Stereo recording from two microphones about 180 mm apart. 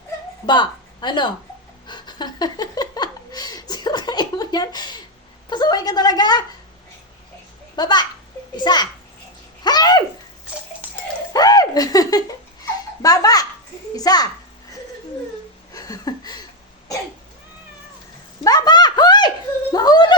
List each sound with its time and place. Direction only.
0.4 s a woman's voice: 25° left (ahead or behind)
1.9 s a sound: 25° left (ahead or behind)
5.5 s a woman's voice: 25° left (ahead or behind)
7.8 s a woman's voice: 25° left (ahead or behind)
9.6 s bathtub: 20° left (ahead or behind)
11.3 s a woman's voice: 20° left (ahead or behind)
15.7 s a sound: 20° left (ahead or behind)
18.4 s a sound: 20° left (ahead or behind)
19.7 s a woman's voice: 20° left (ahead or behind)